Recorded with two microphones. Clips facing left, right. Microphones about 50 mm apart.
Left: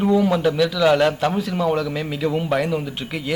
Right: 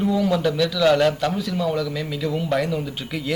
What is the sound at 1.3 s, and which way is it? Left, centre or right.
A man's voice, left.